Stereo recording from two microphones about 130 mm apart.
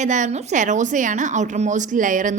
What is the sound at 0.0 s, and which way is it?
A woman's voice, 70° right (ahead or behind).